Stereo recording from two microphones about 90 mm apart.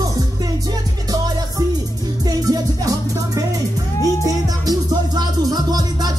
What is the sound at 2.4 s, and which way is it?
Music, 45° right (ahead or behind).